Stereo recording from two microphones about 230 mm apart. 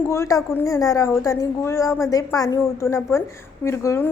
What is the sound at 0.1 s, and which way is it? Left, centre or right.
A woman's voice, centre.